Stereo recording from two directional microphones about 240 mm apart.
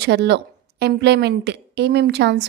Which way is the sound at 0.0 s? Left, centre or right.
Right.